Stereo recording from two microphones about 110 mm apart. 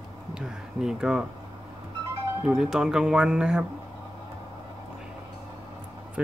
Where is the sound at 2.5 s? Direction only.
5° right (ahead or behind).